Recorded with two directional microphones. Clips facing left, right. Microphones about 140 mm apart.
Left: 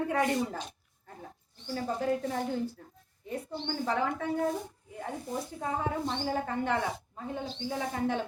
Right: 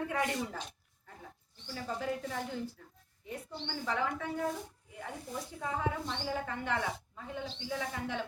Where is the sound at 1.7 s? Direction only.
40° left (ahead or behind).